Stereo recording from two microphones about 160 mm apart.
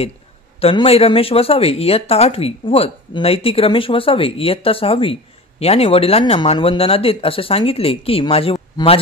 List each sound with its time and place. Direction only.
0.6 s speech: 35° left (ahead or behind)